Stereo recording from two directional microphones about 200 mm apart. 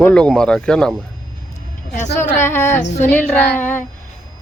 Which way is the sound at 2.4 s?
10° left (ahead or behind).